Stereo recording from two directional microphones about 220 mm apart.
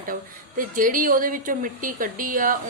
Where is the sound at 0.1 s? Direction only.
40° right (ahead or behind).